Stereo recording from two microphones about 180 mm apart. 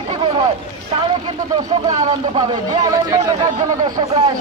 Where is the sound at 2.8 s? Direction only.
20° right (ahead or behind).